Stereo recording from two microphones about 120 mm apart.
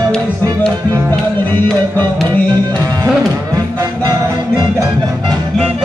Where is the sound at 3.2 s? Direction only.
30° right (ahead or behind).